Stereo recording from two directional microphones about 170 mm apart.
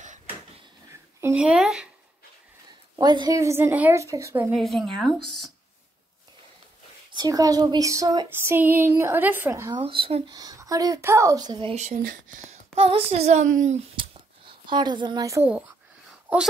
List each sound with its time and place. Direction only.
1.2 s speech: 10° right (ahead or behind)
3.0 s speech: 25° right (ahead or behind)
4.5 s speech: centre (ahead or behind)
7.2 s speech: 20° right (ahead or behind)
9.8 s speech: 30° right (ahead or behind)
11.7 s speech: 45° right (ahead or behind)
13.9 s a sound: 30° right (ahead or behind)